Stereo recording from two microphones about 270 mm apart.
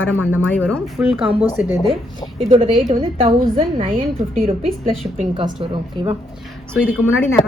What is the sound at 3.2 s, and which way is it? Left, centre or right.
A woman's voice, right.